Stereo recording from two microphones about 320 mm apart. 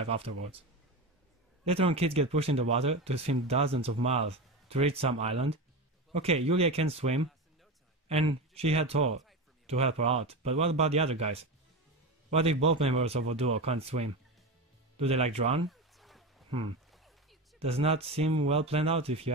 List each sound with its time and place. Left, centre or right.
0.0 s a man's voice: centre
1.7 s speech: centre
15.7 s a sound: centre
17.6 s speech: centre